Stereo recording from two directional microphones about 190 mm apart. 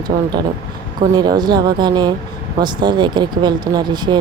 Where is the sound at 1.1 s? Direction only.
20° right (ahead or behind).